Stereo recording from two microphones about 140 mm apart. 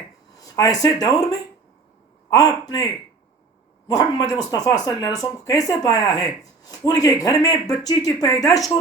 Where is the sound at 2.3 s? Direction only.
25° left (ahead or behind).